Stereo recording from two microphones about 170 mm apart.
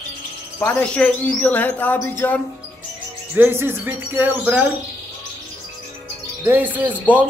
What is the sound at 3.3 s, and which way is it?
Speech, 10° right (ahead or behind).